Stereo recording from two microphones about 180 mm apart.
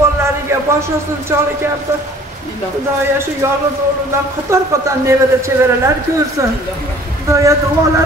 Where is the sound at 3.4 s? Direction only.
15° right (ahead or behind).